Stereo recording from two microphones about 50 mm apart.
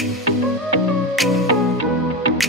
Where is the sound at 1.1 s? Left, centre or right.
Centre.